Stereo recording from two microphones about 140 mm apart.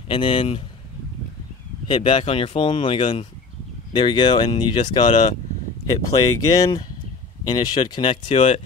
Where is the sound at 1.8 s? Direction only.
40° left (ahead or behind).